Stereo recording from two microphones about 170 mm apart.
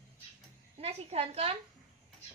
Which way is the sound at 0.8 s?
40° right (ahead or behind).